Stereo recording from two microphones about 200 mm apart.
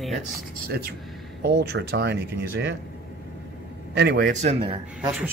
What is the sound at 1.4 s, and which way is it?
Speech, 55° right (ahead or behind).